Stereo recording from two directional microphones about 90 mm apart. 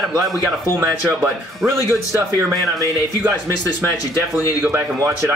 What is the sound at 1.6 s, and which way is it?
Speech, 35° right (ahead or behind).